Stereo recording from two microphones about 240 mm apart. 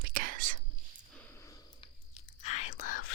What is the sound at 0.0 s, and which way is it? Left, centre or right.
Whispering, right.